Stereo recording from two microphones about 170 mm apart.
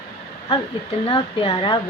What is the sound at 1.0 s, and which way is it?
Speech, 30° left (ahead or behind).